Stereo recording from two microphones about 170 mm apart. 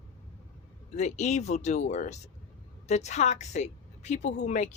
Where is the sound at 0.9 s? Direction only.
40° left (ahead or behind).